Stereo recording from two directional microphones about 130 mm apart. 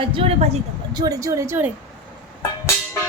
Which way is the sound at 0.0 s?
45° right (ahead or behind).